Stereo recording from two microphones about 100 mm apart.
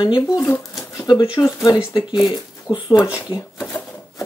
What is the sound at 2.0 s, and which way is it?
Speech, 50° left (ahead or behind).